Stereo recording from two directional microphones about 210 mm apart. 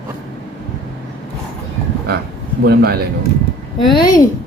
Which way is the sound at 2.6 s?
50° right (ahead or behind).